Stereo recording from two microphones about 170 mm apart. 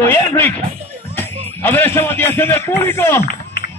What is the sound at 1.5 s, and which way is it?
A man's voice, 15° left (ahead or behind).